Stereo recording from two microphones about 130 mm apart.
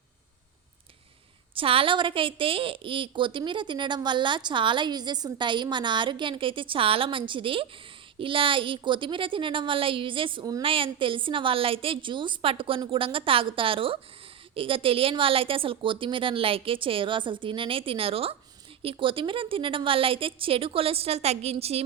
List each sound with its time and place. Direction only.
1.5 s a woman's voice: 45° right (ahead or behind)